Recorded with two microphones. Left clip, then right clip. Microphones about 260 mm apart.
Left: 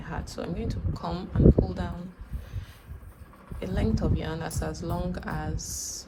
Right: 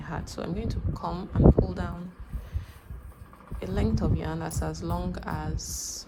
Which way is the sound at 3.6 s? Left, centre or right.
Right.